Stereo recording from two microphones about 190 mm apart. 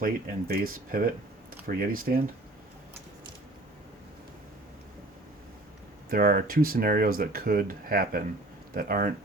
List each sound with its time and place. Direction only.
0.0 s speech: 50° right (ahead or behind)
6.1 s speech: 50° right (ahead or behind)